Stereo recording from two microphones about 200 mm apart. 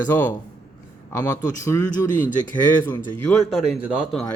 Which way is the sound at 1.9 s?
40° left (ahead or behind).